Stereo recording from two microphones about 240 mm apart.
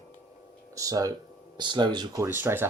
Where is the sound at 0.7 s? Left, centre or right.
Centre.